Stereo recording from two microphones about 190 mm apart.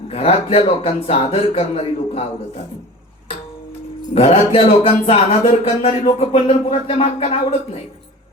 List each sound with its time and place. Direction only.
0.1 s speech: 30° left (ahead or behind)
4.1 s speech: 30° left (ahead or behind)